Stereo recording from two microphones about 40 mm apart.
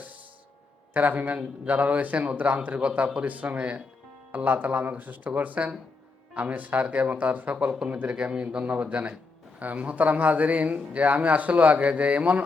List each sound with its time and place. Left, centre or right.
0.9 s a man's voice: right